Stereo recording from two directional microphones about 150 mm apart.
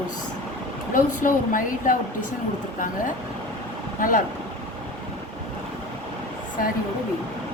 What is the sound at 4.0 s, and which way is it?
Speech, 65° left (ahead or behind).